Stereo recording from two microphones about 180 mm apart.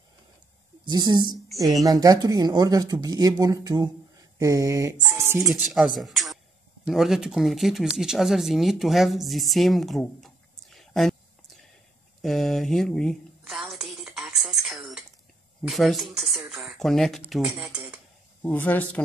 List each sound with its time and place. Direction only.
0.8 s speech: 25° right (ahead or behind)
5.1 s music: 15° right (ahead or behind)
5.4 s speech: centre (ahead or behind)
12.2 s a sound: centre (ahead or behind)
15.6 s speech: centre (ahead or behind)
18.4 s speech: 10° left (ahead or behind)